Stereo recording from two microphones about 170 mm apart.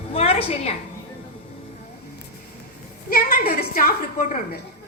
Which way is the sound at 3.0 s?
65° left (ahead or behind).